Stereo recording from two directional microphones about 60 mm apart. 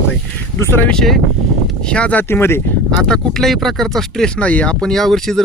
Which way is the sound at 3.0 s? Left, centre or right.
Centre.